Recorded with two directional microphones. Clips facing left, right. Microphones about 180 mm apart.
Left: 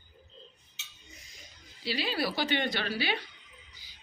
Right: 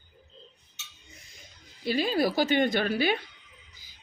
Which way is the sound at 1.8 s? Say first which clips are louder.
Right 6 dB; 50° right (ahead or behind).